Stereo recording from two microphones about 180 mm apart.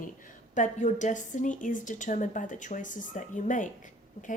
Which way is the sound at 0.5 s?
45° left (ahead or behind).